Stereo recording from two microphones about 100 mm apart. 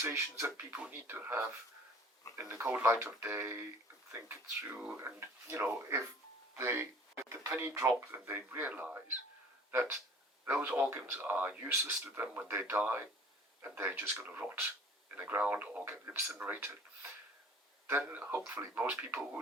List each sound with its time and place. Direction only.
0.0 s speech: 25° right (ahead or behind)
4.9 s speech: 25° right (ahead or behind)